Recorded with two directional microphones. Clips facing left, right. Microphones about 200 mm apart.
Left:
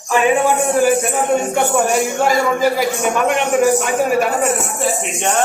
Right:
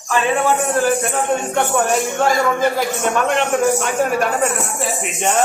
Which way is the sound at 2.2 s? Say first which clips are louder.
Left 1 dB; 5° left (ahead or behind).